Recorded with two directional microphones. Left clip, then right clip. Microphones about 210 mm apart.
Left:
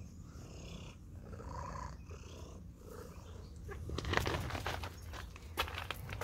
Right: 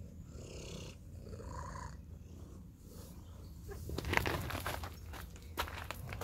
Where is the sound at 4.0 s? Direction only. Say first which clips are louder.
Right 1 dB; 20° right (ahead or behind).